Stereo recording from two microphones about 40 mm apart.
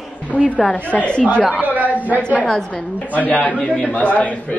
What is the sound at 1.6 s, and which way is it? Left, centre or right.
Speech, right.